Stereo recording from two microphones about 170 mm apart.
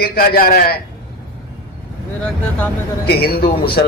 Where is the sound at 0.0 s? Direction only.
65° left (ahead or behind).